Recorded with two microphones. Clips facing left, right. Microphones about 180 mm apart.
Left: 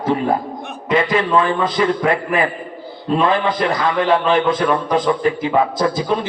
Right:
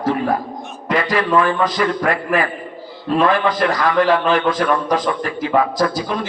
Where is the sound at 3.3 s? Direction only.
25° left (ahead or behind).